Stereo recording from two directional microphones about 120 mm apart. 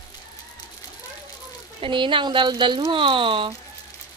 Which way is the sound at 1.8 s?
45° right (ahead or behind).